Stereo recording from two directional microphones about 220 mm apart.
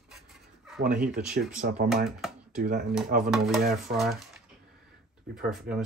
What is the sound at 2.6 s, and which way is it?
Speech, 40° right (ahead or behind).